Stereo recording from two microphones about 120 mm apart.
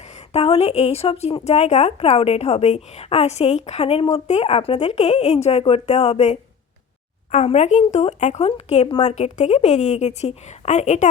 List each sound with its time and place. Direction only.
0.3 s a woman's voice: 60° left (ahead or behind)
9.0 s a woman's voice: 70° left (ahead or behind)